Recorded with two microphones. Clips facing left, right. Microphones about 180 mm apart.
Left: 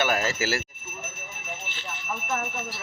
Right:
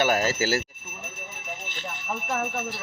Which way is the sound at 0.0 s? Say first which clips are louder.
Right 2 dB; 40° right (ahead or behind).